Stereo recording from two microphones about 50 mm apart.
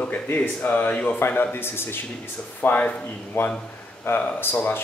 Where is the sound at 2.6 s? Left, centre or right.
Left.